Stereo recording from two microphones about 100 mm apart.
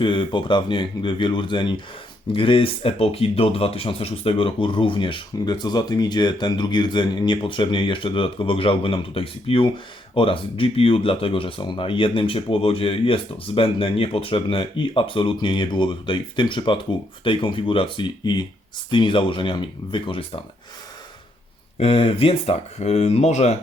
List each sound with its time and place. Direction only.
0.0 s speech: 55° left (ahead or behind)
2.3 s speech: 65° left (ahead or behind)
21.8 s speech: 70° left (ahead or behind); by 23.6 s 90° left